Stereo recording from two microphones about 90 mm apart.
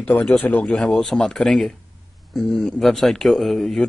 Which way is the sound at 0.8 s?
5° left (ahead or behind).